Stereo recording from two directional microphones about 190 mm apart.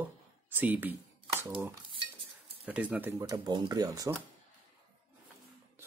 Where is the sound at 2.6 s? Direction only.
5° right (ahead or behind).